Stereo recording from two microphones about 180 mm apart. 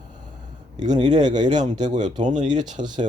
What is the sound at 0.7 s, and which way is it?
Speech, 25° right (ahead or behind).